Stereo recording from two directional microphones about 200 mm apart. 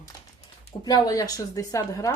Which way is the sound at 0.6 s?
20° left (ahead or behind).